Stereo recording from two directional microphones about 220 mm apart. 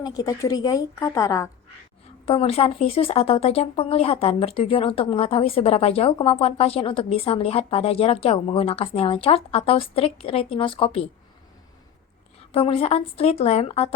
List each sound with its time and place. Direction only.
0.0 s a woman's voice: 15° left (ahead or behind)
2.2 s speech: 25° left (ahead or behind)
12.5 s speech: 25° left (ahead or behind)